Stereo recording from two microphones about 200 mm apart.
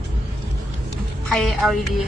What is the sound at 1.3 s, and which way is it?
Speech, centre (ahead or behind).